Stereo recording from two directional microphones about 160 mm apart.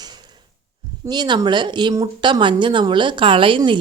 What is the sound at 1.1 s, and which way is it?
Speech, 25° right (ahead or behind).